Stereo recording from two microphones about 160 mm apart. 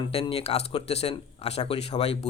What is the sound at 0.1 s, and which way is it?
Speech, 40° left (ahead or behind).